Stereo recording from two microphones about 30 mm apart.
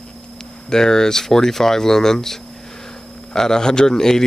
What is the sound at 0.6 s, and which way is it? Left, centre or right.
A man's voice, centre.